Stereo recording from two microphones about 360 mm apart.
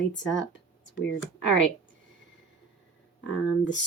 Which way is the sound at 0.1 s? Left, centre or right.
Left.